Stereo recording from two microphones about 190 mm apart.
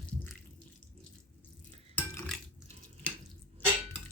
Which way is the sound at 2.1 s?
5° left (ahead or behind).